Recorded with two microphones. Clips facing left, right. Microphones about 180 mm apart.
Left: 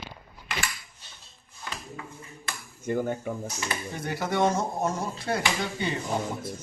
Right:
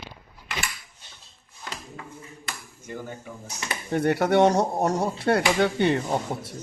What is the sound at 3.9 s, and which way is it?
Speech, 65° right (ahead or behind).